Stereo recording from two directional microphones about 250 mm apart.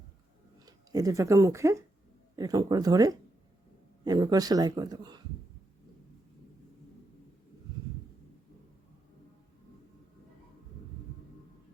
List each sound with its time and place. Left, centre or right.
0.6 s speech: centre